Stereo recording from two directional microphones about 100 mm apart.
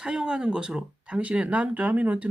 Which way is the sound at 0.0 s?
10° right (ahead or behind).